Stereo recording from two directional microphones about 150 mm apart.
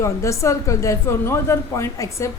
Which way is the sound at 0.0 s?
20° left (ahead or behind).